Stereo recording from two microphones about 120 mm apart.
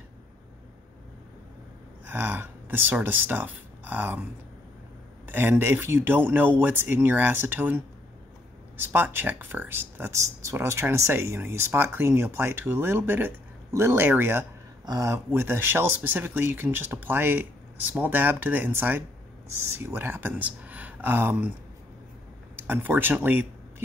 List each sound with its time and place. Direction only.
2.0 s speech: 15° right (ahead or behind)
22.6 s speech: 15° right (ahead or behind)